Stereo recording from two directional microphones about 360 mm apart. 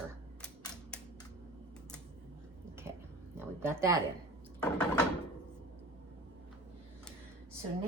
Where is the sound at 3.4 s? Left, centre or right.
Centre.